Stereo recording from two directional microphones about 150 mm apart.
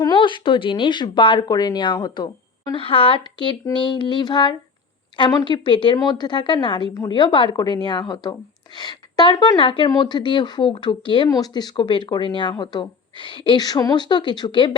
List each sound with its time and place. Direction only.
0.0 s a woman's voice: 30° left (ahead or behind)